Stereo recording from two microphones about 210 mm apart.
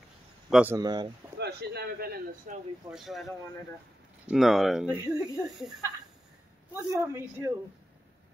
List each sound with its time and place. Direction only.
0.5 s speech: 5° right (ahead or behind)
0.7 s speech: 20° right (ahead or behind)
1.4 s a man's voice: 50° right (ahead or behind)
2.9 s speech: centre (ahead or behind)
6.7 s a man's voice: 10° right (ahead or behind)